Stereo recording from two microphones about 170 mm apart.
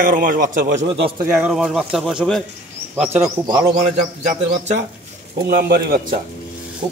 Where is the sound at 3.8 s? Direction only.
45° right (ahead or behind).